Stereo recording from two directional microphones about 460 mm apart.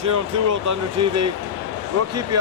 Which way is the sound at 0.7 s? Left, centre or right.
Right.